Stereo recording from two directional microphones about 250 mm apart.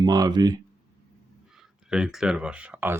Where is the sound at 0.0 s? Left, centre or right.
Centre.